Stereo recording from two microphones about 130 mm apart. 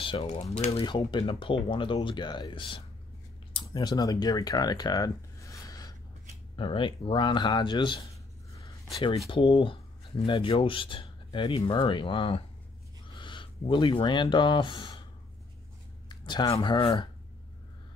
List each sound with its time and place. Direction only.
0.0 s a sound: 45° left (ahead or behind)
0.3 s speech: 55° left (ahead or behind)
0.7 s speech: 35° left (ahead or behind)
6.5 s speech: 40° left (ahead or behind)
9.3 s speech: 40° left (ahead or behind)
16.1 s speech: 35° left (ahead or behind)